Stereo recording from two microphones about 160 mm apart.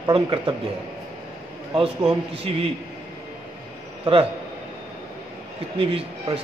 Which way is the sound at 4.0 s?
35° right (ahead or behind).